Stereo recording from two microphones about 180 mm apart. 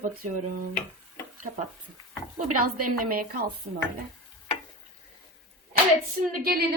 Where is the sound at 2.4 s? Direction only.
50° right (ahead or behind).